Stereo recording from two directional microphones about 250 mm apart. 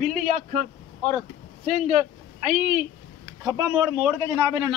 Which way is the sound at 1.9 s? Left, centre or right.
Right.